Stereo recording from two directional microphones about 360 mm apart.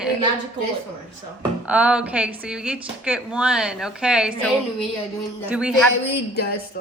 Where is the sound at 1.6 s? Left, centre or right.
Centre.